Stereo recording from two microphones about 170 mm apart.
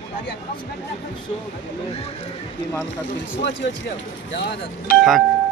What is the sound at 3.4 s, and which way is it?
Speech, 90° left.